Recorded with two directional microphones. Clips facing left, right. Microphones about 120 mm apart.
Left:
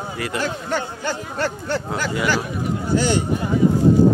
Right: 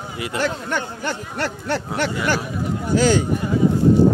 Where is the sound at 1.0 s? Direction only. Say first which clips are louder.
Left 1 dB; 70° right (ahead or behind).